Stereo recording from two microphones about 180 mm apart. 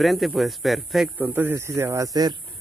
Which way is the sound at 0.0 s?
Centre (ahead or behind).